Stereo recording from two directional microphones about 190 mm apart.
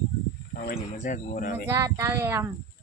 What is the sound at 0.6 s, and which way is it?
Speech, 45° left (ahead or behind).